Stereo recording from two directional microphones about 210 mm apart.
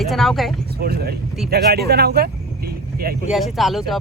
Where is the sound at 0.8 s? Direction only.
45° right (ahead or behind).